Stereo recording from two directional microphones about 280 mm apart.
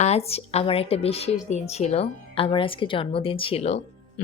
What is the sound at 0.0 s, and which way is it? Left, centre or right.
Speech, left.